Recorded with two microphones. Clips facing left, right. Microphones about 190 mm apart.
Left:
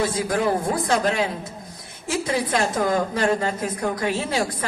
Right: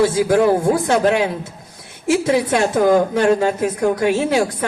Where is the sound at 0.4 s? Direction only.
65° right (ahead or behind).